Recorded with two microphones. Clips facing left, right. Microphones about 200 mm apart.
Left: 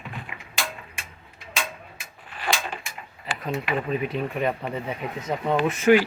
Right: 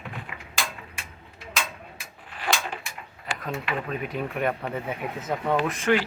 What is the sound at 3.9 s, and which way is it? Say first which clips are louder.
Speech: left 4 dB; centre (ahead or behind).